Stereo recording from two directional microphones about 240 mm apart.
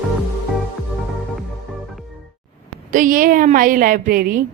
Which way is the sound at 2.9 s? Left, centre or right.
Right.